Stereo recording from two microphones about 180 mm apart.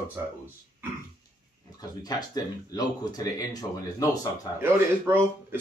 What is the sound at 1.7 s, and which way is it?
Speech, 20° left (ahead or behind).